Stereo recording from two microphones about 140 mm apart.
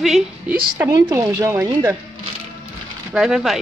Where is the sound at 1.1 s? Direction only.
20° right (ahead or behind).